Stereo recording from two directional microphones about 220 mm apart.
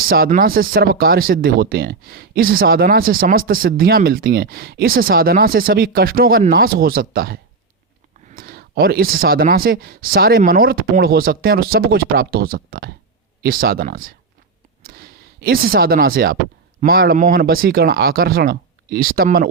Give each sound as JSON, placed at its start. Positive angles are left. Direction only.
{"t": 0.1, "sound": "speech", "side_deg": -40}